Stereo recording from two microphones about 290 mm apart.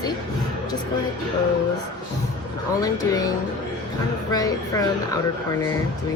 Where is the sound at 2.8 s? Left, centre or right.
Centre.